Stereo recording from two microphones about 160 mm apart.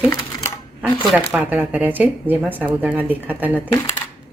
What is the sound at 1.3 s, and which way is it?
Speech, 10° right (ahead or behind).